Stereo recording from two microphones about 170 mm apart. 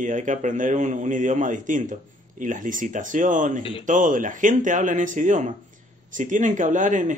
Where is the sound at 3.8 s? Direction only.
50° right (ahead or behind).